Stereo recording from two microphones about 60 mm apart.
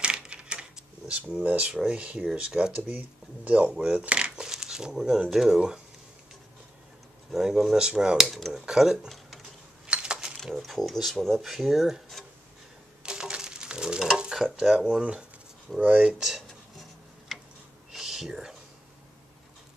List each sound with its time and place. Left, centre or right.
0.0 s coin: centre
1.4 s speech: right
7.3 s speech: centre
8.3 s speech: centre
8.5 s speech: centre
9.8 s coin: centre
10.4 s speech: centre
13.0 s frying: centre
15.7 s speech: centre
17.3 s tick-tock: centre
17.9 s whispering: centre